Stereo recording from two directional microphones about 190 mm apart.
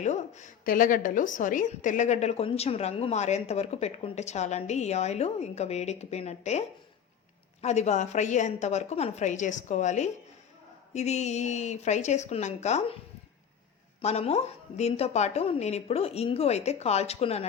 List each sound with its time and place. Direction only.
0.0 s a woman's voice: 40° left (ahead or behind)
14.0 s a woman's voice: 35° left (ahead or behind)